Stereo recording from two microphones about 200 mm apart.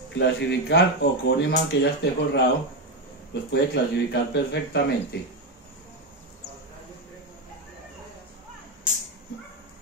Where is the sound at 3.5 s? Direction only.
60° left (ahead or behind).